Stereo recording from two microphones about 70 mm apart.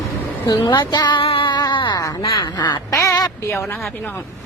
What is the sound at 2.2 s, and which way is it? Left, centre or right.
Speech, left.